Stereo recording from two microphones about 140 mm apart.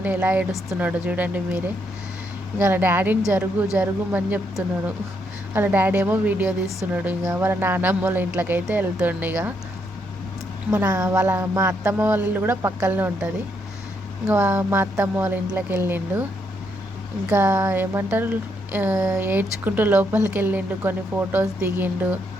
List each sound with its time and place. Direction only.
0.0 s speech: 10° right (ahead or behind)
5.5 s speech: 15° right (ahead or behind)
10.7 s speech: 20° right (ahead or behind)
17.2 s speech: 15° right (ahead or behind)